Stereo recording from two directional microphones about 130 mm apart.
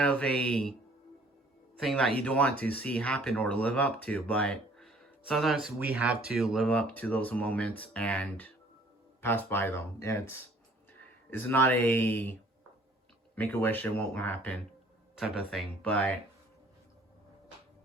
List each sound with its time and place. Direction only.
0.0 s speech: 5° left (ahead or behind)
1.8 s speech: 5° left (ahead or behind)
6.7 s speech: 10° left (ahead or behind)
15.1 s speech: 5° right (ahead or behind)